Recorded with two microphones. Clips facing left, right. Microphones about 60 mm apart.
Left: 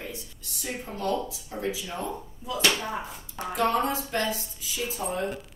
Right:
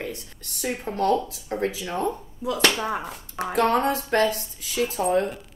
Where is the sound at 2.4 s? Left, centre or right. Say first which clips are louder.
Right 4 dB; right.